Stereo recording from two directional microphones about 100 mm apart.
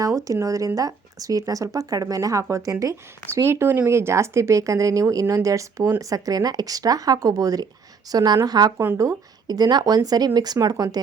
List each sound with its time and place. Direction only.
0.3 s speech: 35° right (ahead or behind)